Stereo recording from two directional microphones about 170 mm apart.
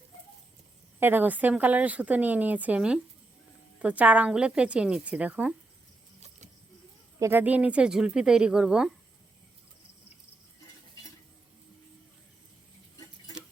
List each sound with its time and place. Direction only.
0.9 s speech: 10° right (ahead or behind)
6.1 s a sound: 40° right (ahead or behind)
7.2 s speech: 15° right (ahead or behind)